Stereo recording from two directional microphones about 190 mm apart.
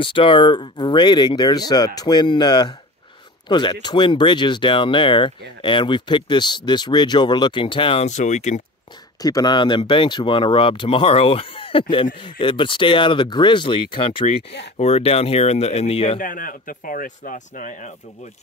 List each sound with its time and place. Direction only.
0.0 s speech: 25° left (ahead or behind)
9.2 s speech: 20° left (ahead or behind)
16.2 s speech: 45° left (ahead or behind)